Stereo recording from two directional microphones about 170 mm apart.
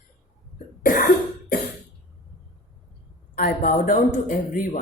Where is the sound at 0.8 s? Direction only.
55° left (ahead or behind).